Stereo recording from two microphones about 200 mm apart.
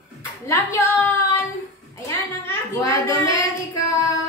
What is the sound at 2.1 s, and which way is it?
A woman's voice, 10° left (ahead or behind).